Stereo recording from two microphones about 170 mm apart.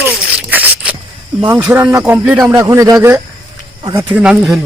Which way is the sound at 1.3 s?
5° right (ahead or behind).